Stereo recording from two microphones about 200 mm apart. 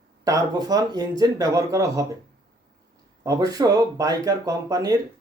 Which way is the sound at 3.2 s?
20° right (ahead or behind).